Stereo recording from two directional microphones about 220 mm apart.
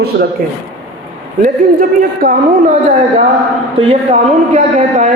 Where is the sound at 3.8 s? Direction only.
25° right (ahead or behind).